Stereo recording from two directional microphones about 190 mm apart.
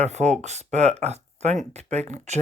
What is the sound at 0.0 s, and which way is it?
Speech, 35° right (ahead or behind).